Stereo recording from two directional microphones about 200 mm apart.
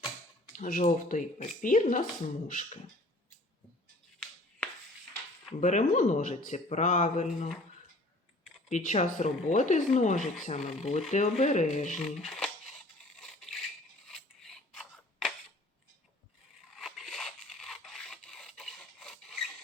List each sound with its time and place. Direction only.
0.5 s speech: 40° left (ahead or behind)
5.5 s speech: 35° left (ahead or behind)
8.7 s speech: 35° left (ahead or behind)
11.9 s speech: centre (ahead or behind)
13.1 s crushing: centre (ahead or behind)
14.1 s scissors: centre (ahead or behind)
16.7 s crushing: centre (ahead or behind)